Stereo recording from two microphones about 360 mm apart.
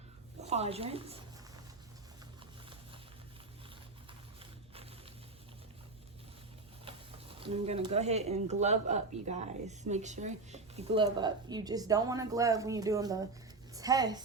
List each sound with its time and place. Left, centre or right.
0.4 s speech: centre
7.3 s speech: centre